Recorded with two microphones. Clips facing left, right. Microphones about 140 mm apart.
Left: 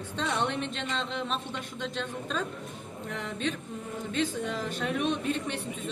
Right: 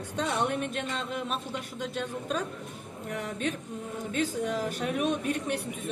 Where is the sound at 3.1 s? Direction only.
10° right (ahead or behind).